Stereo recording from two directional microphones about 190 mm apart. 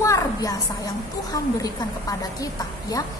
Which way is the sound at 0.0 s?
15° left (ahead or behind).